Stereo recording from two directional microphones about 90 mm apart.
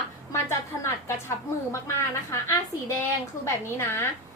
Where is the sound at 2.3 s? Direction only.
35° left (ahead or behind).